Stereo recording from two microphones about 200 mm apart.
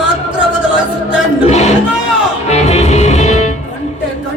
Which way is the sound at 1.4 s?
35° left (ahead or behind).